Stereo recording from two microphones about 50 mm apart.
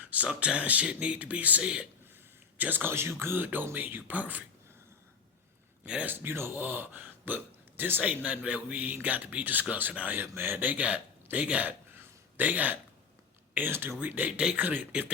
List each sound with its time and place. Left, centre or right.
0.0 s a sound: right
0.3 s speech: right
2.9 s a sound: right
3.8 s speech: right
5.8 s a man's voice: right
6.1 s a sound: right
6.7 s speech: right
10.1 s speech: right
13.7 s a sound: right
14.0 s speech: right
14.3 s speech: right
14.6 s speech: right